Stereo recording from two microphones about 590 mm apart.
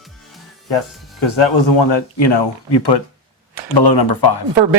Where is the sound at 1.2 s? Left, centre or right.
Left.